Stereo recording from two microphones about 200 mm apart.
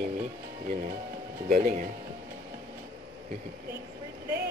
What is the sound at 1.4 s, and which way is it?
Speech, 40° right (ahead or behind).